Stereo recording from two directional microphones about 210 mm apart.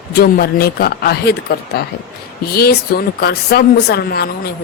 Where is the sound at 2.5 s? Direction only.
45° left (ahead or behind).